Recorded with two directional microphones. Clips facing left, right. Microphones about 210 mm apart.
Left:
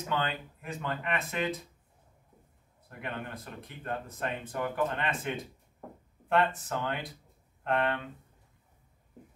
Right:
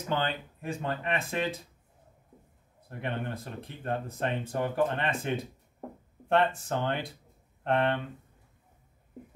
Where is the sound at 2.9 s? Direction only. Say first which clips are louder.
Right 4 dB; 30° right (ahead or behind).